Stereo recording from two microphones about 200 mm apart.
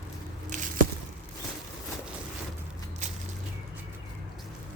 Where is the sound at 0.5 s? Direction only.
40° right (ahead or behind).